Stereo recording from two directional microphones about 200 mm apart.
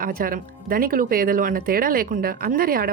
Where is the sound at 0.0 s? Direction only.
45° right (ahead or behind).